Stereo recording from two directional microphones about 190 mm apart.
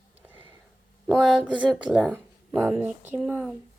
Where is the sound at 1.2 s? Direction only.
5° right (ahead or behind).